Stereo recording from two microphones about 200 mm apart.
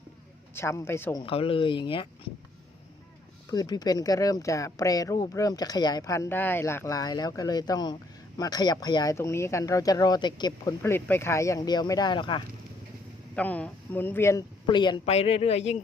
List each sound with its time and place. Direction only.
0.5 s speech: 15° left (ahead or behind)
1.2 s speech: 25° left (ahead or behind)
3.5 s speech: 20° left (ahead or behind)
13.3 s speech: 5° left (ahead or behind); by 15.8 s 30° left (ahead or behind)